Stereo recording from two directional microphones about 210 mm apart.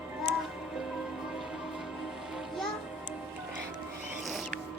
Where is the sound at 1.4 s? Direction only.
Centre (ahead or behind).